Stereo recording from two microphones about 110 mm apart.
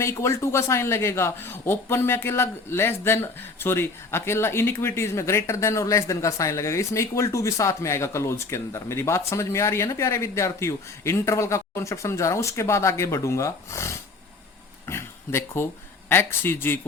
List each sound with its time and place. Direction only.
0.0 s speech: 25° left (ahead or behind)
14.8 s a sound: 25° left (ahead or behind)
16.0 s speech: 20° left (ahead or behind)